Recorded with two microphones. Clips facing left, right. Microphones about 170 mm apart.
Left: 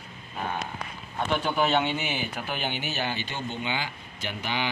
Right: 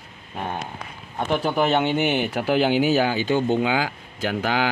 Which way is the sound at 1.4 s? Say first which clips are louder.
Right 4 dB; 50° right (ahead or behind).